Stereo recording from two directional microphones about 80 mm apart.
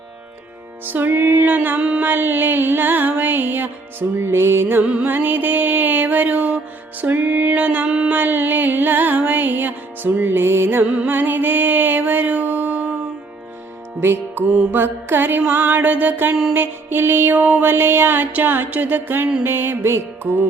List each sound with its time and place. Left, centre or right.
0.9 s music: right
2.0 s music: right
4.8 s music: centre
5.0 s music: right
10.8 s mantra: centre
14.0 s music: right
16.3 s music: centre
16.6 s music: right